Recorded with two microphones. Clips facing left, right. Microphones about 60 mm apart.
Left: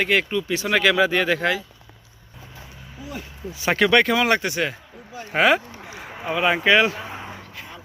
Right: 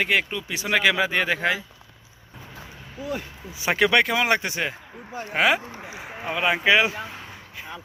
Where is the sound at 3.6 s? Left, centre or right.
Centre.